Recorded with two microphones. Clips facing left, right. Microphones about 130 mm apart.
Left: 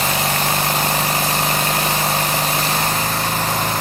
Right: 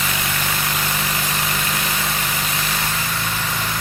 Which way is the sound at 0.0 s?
35° left (ahead or behind).